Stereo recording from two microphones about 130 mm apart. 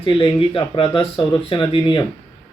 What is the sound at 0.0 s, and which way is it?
Speech, 40° left (ahead or behind).